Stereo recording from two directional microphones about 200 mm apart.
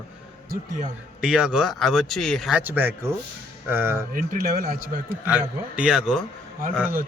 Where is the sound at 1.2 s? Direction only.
5° right (ahead or behind).